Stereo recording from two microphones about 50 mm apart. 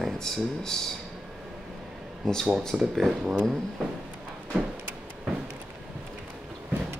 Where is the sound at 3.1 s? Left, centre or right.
Centre.